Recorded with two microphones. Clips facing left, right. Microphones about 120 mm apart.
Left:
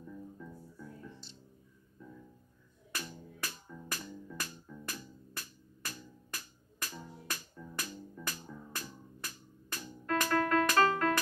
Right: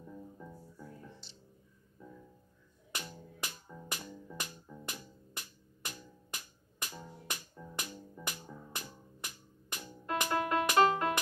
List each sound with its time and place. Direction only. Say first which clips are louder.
0.0 s music: left 1 dB; 30° right (ahead or behind)
2.9 s music: left 1 dB; 20° right (ahead or behind)